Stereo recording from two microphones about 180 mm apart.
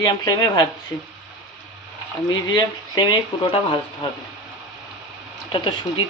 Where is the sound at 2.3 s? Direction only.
25° left (ahead or behind).